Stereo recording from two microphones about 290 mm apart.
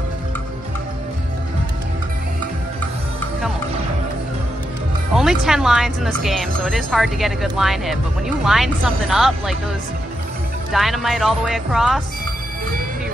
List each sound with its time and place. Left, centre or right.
5.1 s speech: centre
10.7 s speech: centre